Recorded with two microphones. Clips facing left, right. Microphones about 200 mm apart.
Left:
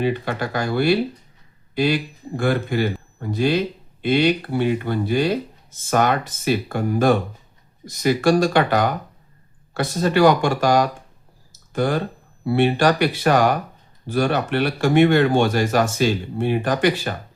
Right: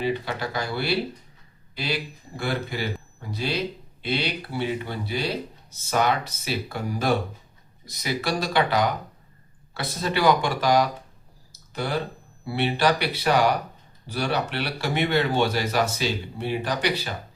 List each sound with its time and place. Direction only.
0.0 s speech: 50° left (ahead or behind)